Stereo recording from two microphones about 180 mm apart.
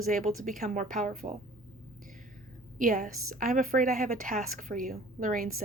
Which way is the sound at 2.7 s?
50° right (ahead or behind).